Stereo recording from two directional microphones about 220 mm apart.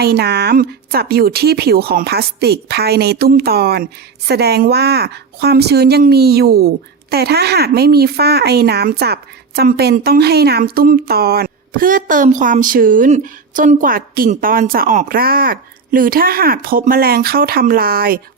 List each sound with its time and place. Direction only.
0.0 s a woman's voice: 45° right (ahead or behind)